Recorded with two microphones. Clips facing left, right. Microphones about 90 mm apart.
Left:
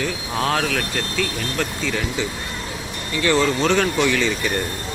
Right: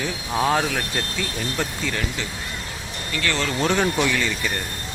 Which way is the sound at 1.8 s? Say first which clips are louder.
Left 3 dB; 5° left (ahead or behind).